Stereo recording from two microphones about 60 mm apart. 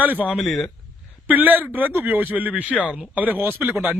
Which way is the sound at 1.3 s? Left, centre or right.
Right.